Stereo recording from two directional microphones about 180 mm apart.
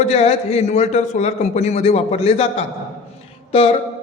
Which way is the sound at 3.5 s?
30° left (ahead or behind).